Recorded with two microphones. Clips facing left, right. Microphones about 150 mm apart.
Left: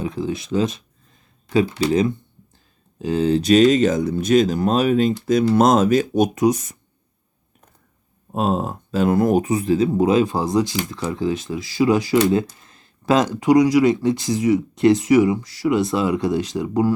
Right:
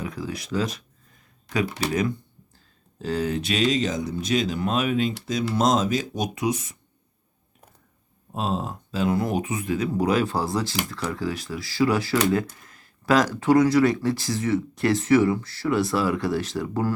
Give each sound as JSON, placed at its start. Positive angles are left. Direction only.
{"t": 0.0, "sound": "a sound", "side_deg": 25}
{"t": 1.9, "sound": "speech", "side_deg": 25}
{"t": 5.2, "sound": "speech", "side_deg": 50}
{"t": 8.3, "sound": "speech", "side_deg": 50}